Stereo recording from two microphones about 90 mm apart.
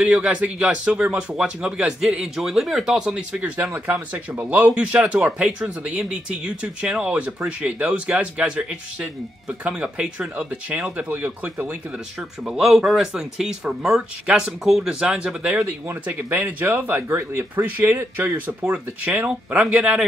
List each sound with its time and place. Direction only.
0.0 s speech: 10° right (ahead or behind)
12.4 s speech: 5° right (ahead or behind)
15.6 s speech: 25° right (ahead or behind)